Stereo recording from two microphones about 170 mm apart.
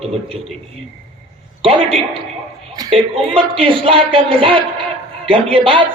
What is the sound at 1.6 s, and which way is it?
Speech, 30° right (ahead or behind).